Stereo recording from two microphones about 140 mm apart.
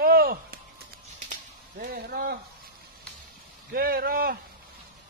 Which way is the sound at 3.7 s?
90° right.